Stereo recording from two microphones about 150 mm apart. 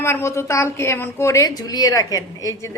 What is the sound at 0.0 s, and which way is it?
A woman's voice, 15° left (ahead or behind).